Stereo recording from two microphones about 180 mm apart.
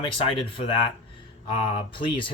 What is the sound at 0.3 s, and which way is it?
Speech, 30° left (ahead or behind).